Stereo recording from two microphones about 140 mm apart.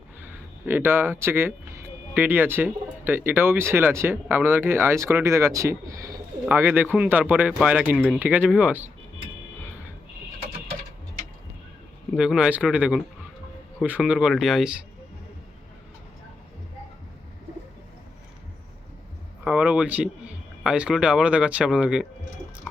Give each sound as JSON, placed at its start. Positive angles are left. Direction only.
{"t": 0.7, "sound": "speech", "side_deg": -15}
{"t": 12.1, "sound": "speech", "side_deg": -5}
{"t": 19.5, "sound": "speech", "side_deg": -10}